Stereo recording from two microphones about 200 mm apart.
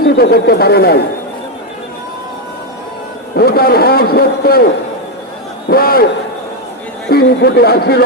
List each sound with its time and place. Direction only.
0.0 s a man's voice: 50° left (ahead or behind)
3.3 s a man's voice: 50° left (ahead or behind)
7.1 s a man's voice: 50° left (ahead or behind)